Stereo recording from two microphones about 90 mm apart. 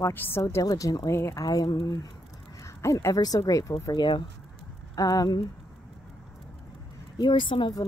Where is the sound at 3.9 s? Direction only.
60° left (ahead or behind).